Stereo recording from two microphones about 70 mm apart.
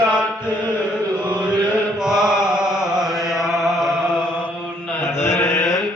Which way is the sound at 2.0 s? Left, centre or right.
Centre.